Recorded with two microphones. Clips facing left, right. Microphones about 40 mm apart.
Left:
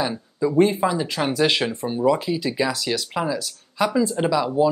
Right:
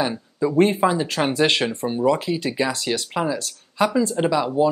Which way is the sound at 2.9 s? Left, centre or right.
Centre.